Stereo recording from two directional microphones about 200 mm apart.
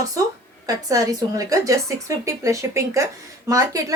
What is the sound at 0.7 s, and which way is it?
Speech, 15° right (ahead or behind).